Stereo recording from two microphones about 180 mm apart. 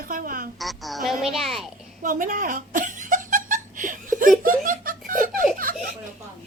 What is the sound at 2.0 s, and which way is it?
Laughter, 50° right (ahead or behind).